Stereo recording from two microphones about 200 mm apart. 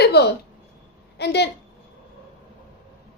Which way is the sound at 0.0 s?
55° left (ahead or behind).